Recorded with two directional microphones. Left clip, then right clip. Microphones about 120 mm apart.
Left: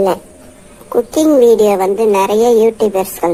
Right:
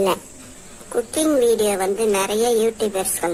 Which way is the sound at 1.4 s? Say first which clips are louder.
Left 10 dB; 20° left (ahead or behind).